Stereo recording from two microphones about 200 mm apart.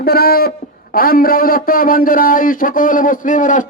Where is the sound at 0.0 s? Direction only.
50° left (ahead or behind).